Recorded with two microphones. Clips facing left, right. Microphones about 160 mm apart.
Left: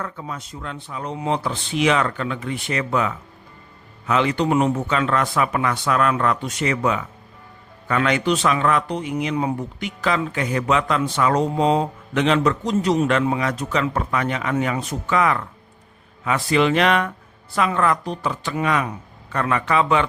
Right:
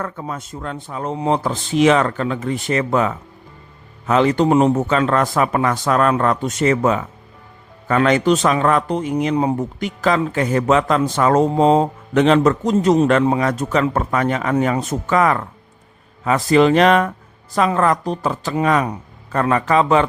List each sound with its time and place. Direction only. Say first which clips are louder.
0.0 s a man's voice: right 4 dB; 45° right (ahead or behind)